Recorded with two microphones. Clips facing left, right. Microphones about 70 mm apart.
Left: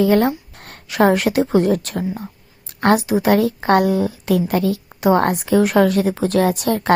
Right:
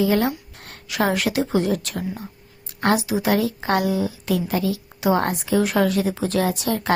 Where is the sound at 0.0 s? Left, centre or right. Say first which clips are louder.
Left 5 dB; left.